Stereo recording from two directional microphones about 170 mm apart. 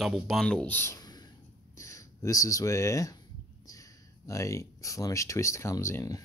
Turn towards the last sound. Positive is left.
turn(degrees=20)  # may be behind; listen again after turning